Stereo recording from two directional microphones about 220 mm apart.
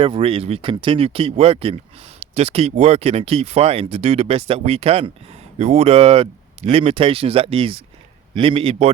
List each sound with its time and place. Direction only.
0.0 s speech: 25° right (ahead or behind)